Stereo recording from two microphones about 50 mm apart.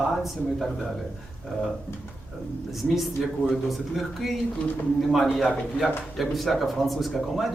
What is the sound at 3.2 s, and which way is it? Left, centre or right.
A man's voice, centre.